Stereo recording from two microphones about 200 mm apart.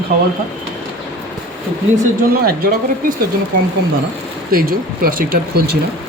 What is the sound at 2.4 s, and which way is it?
Speech, 45° right (ahead or behind).